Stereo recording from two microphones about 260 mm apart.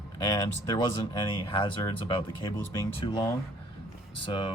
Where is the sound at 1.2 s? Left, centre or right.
Centre.